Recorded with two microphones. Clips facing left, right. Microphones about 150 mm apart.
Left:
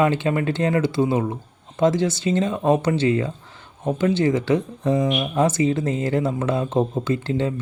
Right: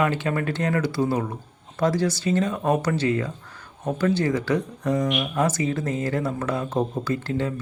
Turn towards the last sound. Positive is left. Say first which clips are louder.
# left 3 dB
turn(degrees=25)  # may be behind; listen again after turning